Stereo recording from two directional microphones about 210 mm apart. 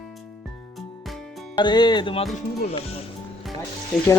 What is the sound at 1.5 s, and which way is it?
Speech, 20° left (ahead or behind).